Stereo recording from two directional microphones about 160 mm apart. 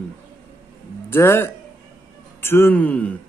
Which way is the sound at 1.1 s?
15° left (ahead or behind).